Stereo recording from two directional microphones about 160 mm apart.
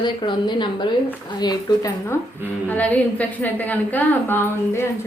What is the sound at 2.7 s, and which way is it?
A woman's voice, 10° left (ahead or behind).